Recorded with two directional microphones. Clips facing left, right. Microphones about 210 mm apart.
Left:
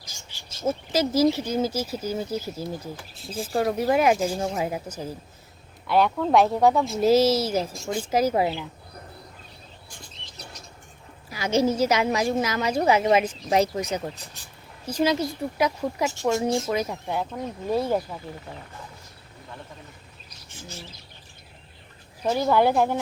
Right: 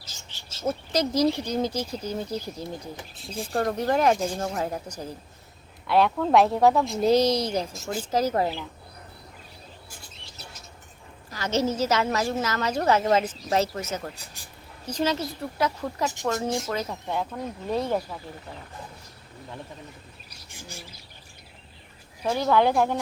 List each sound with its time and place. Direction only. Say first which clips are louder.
0.0 s a woman's voice: left 1 dB; 10° left (ahead or behind)
8.1 s a woman's voice: left 2 dB; 10° left (ahead or behind)
11.3 s a woman's voice: left 3 dB; 10° left (ahead or behind)
20.5 s speech: left 2 dB; 10° right (ahead or behind)
22.3 s a woman's voice: left 1 dB; 10° left (ahead or behind)